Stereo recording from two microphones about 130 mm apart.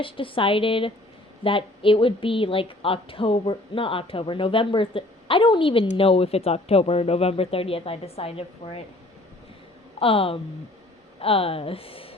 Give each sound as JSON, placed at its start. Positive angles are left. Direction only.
{"t": 0.0, "sound": "a woman's voice", "side_deg": 40}
{"t": 10.0, "sound": "a woman's voice", "side_deg": 45}